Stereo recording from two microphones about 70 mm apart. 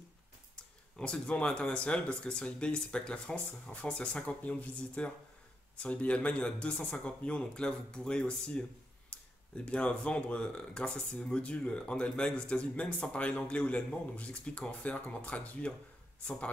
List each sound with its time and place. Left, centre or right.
0.9 s speech: centre
9.1 s a sound: centre
9.7 s speech: centre